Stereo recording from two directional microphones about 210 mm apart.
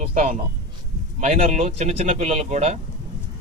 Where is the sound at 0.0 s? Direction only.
35° right (ahead or behind).